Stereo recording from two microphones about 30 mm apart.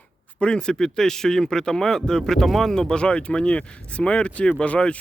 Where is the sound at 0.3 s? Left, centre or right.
Left; by 2.5 s centre.